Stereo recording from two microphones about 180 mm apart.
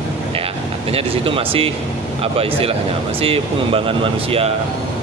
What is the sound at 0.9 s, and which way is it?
Speech, 30° right (ahead or behind).